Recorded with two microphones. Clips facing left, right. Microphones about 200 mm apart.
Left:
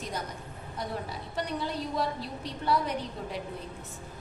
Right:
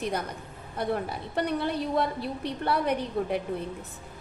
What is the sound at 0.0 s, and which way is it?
A woman's voice, 60° right (ahead or behind).